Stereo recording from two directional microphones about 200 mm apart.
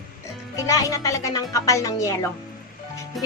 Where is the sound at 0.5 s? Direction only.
15° left (ahead or behind).